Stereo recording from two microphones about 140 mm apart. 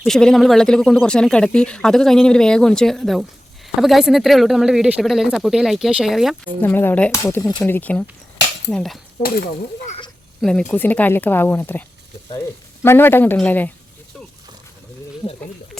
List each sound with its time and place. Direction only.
0.1 s speech: 5° left (ahead or behind)
6.6 s speech: 15° left (ahead or behind)
10.4 s speech: 5° left (ahead or behind)